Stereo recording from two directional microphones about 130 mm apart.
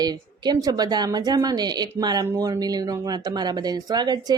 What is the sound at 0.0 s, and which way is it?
Speech, 30° right (ahead or behind).